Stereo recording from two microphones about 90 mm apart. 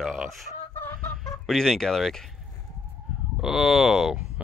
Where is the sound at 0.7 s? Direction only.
20° left (ahead or behind).